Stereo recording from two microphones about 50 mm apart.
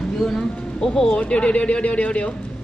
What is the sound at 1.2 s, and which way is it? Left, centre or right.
Speech, left.